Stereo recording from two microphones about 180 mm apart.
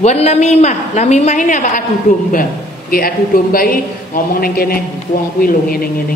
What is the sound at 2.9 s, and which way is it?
A man's voice, 55° left (ahead or behind).